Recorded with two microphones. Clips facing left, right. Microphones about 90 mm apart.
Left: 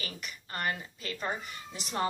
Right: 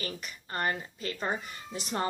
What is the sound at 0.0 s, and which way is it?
Speech, 35° right (ahead or behind).